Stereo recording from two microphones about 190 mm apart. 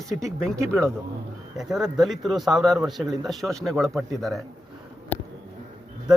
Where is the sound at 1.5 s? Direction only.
Centre (ahead or behind).